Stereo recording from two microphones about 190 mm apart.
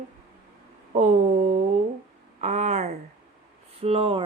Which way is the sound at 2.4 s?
40° right (ahead or behind).